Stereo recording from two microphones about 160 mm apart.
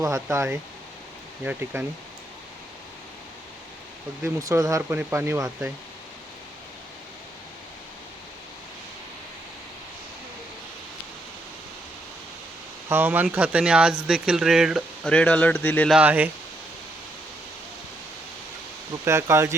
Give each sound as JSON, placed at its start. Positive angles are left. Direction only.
{"t": 0.0, "sound": "speech", "side_deg": -20}
{"t": 4.2, "sound": "speech", "side_deg": -20}
{"t": 12.9, "sound": "speech", "side_deg": -10}
{"t": 15.9, "sound": "speech", "side_deg": -10}
{"t": 19.0, "sound": "speech", "side_deg": -15}